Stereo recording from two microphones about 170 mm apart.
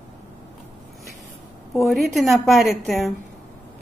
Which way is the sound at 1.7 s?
Centre (ahead or behind).